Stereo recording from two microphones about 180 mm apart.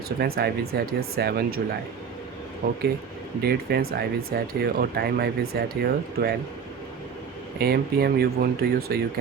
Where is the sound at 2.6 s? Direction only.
50° right (ahead or behind).